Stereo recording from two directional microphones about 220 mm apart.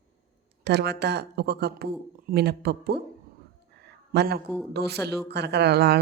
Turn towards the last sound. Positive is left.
turn(degrees=-45)  # may be behind; listen again after turning